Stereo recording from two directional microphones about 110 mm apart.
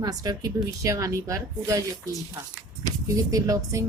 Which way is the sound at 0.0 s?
35° right (ahead or behind).